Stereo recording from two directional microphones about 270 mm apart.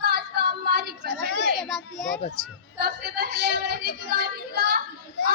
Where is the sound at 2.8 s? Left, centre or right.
Right.